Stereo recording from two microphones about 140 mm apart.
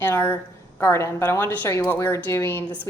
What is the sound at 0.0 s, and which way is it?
A woman's voice, 15° left (ahead or behind).